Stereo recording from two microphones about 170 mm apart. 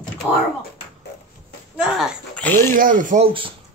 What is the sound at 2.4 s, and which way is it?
Speech, 10° left (ahead or behind).